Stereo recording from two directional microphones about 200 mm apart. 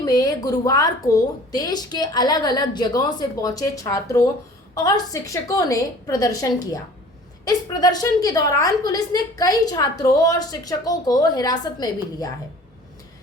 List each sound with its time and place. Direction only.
0.0 s a woman's voice: 20° left (ahead or behind)